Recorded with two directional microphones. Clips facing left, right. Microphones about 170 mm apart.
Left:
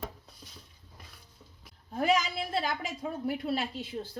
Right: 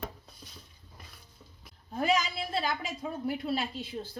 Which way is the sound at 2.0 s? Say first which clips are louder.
Left 1 dB; 55° left (ahead or behind).